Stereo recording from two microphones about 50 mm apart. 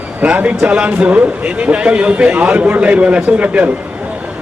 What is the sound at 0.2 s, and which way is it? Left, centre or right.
A man's voice, right.